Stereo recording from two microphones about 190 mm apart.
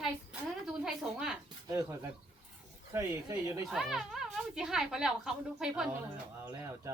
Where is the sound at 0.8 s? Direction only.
5° right (ahead or behind).